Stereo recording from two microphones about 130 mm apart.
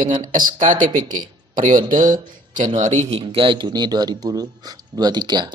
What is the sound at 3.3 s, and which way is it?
A man's voice, 40° right (ahead or behind).